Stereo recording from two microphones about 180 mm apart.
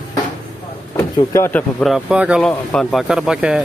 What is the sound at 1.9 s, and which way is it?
Speech, 5° right (ahead or behind).